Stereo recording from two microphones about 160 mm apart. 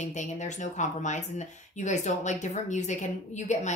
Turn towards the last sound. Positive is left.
turn(degrees=50)  # may be behind; listen again after turning